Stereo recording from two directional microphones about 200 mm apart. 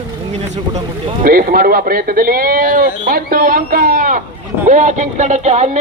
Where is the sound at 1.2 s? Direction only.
45° right (ahead or behind).